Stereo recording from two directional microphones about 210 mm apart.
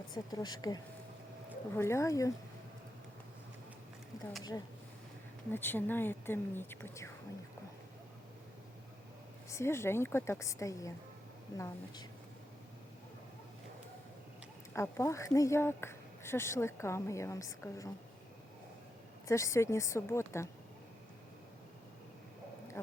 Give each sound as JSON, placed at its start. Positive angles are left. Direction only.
{"t": 0.1, "sound": "speech", "side_deg": 20}
{"t": 5.5, "sound": "speech", "side_deg": 10}
{"t": 9.5, "sound": "speech", "side_deg": 15}
{"t": 14.7, "sound": "speech", "side_deg": 15}
{"t": 19.3, "sound": "speech", "side_deg": 15}